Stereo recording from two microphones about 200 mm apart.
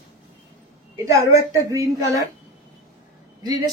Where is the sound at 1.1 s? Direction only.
15° right (ahead or behind).